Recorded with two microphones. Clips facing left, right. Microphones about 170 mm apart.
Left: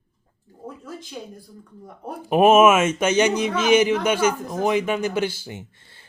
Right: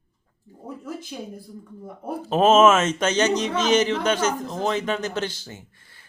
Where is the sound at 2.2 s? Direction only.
15° left (ahead or behind).